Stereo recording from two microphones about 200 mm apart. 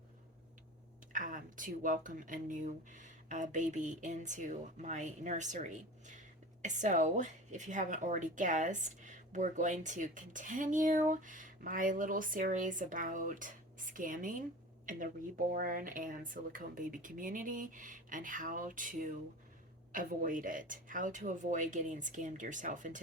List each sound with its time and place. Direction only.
1.1 s speech: 40° right (ahead or behind)